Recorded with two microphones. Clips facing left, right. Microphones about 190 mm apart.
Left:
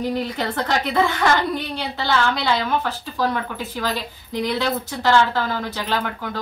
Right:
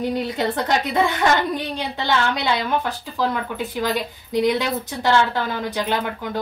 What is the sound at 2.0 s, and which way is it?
A woman's voice, 20° right (ahead or behind).